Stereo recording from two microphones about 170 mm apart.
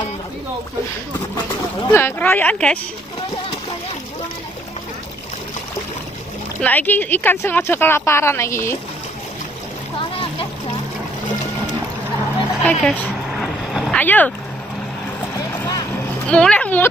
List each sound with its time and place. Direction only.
1.9 s a woman's voice: 15° left (ahead or behind)
6.6 s a woman's voice: 10° left (ahead or behind)
12.6 s a woman's voice: 10° left (ahead or behind)
13.4 s vehicle: centre (ahead or behind)
13.9 s speech: 10° left (ahead or behind)
15.3 s boat: 20° left (ahead or behind)
16.3 s a woman's voice: 5° left (ahead or behind)